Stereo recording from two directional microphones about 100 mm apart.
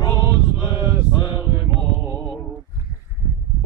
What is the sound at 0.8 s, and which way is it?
Mantra, 60° left (ahead or behind).